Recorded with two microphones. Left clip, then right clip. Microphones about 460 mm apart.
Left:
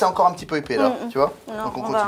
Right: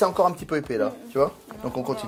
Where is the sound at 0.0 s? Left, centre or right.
Right; by 1.3 s centre.